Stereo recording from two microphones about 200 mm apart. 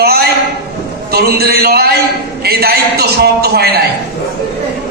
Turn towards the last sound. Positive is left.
turn(degrees=-50)  # may be behind; listen again after turning